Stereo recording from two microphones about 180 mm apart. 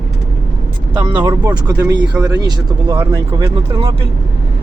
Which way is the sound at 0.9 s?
25° right (ahead or behind).